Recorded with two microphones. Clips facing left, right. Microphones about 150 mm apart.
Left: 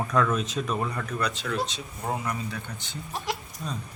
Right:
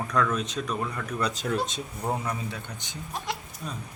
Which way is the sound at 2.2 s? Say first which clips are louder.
Left 1 dB; 20° right (ahead or behind).